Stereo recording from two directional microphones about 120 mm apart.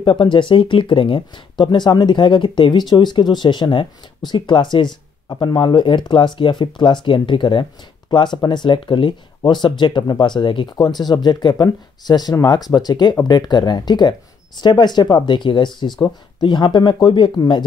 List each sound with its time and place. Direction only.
0.0 s speech: 45° left (ahead or behind)